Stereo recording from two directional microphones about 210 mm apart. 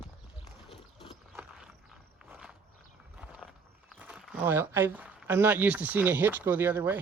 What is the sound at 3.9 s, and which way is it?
Speech, 5° right (ahead or behind).